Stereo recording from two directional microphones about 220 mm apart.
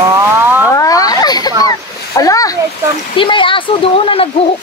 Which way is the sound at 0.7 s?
15° left (ahead or behind).